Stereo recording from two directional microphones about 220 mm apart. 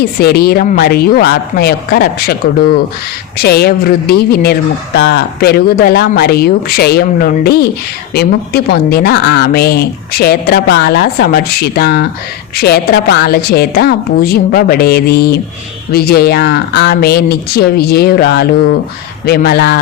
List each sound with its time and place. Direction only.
0.2 s speech: 45° left (ahead or behind)